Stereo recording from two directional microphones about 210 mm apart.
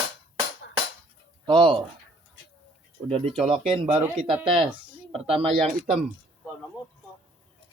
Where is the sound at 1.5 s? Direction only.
25° right (ahead or behind).